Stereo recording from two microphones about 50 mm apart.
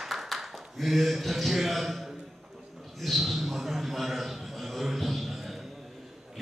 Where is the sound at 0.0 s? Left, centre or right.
Centre.